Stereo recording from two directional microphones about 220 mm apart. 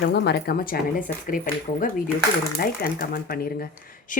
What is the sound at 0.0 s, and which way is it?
A woman's voice, 50° left (ahead or behind).